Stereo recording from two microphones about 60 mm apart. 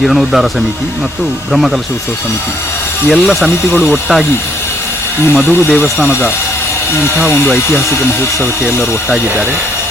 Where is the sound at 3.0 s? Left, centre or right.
Centre.